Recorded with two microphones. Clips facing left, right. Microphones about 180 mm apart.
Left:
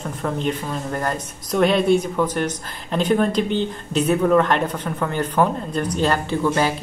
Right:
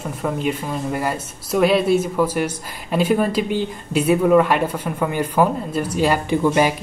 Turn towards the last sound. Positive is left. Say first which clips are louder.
# right 3 dB
turn(degrees=-15)  # may be behind; listen again after turning